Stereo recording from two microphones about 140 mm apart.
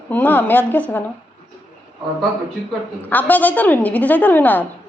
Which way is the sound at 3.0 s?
15° left (ahead or behind).